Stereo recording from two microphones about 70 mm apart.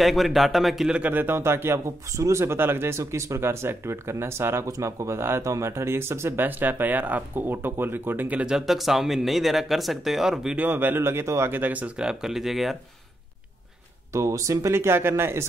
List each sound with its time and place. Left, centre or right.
0.0 s speech: centre
0.8 s a man's voice: centre
1.1 s speech: right
4.6 s speech: right
8.5 s speech: centre
10.5 s speech: right
11.5 s speech: right
12.0 s speech: centre
14.1 s speech: right